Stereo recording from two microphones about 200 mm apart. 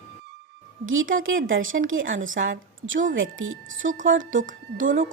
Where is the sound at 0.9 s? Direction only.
80° right.